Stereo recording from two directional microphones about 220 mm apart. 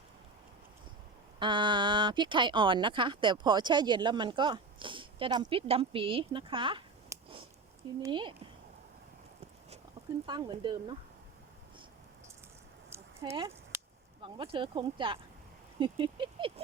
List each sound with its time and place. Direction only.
1.4 s speech: 20° right (ahead or behind)
10.2 s speech: 20° right (ahead or behind)
13.2 s speech: 25° right (ahead or behind)
13.7 s a sound: 10° right (ahead or behind)
14.2 s speech: 25° right (ahead or behind)